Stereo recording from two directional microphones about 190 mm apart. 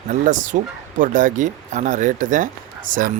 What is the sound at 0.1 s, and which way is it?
Speech, 45° right (ahead or behind).